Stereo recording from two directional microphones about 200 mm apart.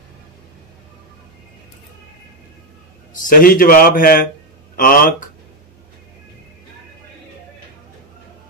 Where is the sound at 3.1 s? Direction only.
45° left (ahead or behind).